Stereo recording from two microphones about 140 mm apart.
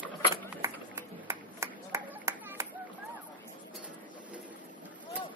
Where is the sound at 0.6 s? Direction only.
15° right (ahead or behind).